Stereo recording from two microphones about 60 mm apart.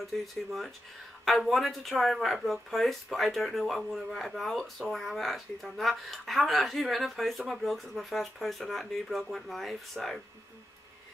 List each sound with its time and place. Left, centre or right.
0.0 s speech: centre